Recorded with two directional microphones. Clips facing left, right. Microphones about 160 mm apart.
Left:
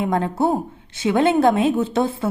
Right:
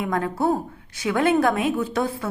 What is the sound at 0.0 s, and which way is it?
A woman's voice, 25° left (ahead or behind).